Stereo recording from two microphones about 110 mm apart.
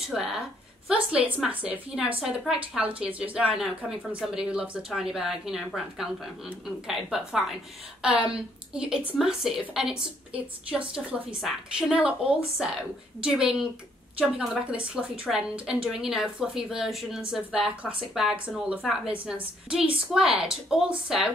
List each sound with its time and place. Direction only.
0.1 s a woman's voice: 5° right (ahead or behind)